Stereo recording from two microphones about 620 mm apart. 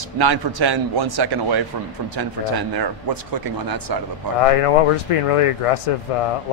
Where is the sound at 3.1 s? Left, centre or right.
Right.